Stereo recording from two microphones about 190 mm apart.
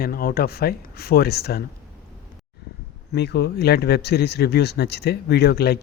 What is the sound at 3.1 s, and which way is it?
Speech, 60° left (ahead or behind).